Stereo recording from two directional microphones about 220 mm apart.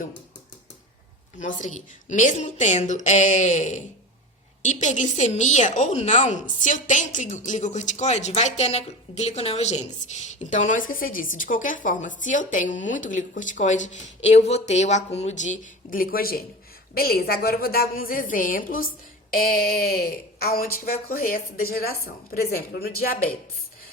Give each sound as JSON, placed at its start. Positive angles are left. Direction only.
{"t": 1.4, "sound": "a woman's voice", "side_deg": 35}